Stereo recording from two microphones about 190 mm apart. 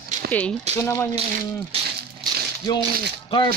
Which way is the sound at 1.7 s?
30° right (ahead or behind).